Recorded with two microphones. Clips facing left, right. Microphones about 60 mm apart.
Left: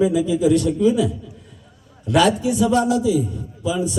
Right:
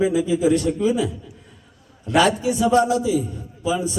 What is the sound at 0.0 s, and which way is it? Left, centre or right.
A man's voice, right.